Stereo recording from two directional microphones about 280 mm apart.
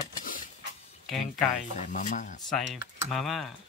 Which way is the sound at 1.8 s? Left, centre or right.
Left.